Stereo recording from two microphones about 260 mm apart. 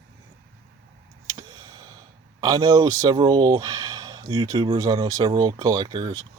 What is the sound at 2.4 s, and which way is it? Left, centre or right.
Speech, centre.